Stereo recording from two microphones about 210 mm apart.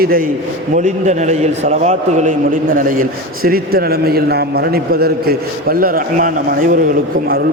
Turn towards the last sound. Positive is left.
turn(degrees=-40)  # may be behind; listen again after turning